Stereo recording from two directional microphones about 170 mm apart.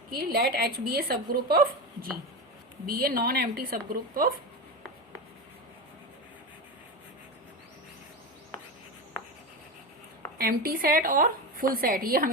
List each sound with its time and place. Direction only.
0.1 s a woman's voice: 65° right (ahead or behind)
10.3 s a woman's voice: 60° right (ahead or behind)